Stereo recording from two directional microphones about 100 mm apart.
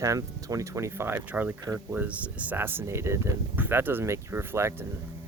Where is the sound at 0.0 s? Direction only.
35° right (ahead or behind).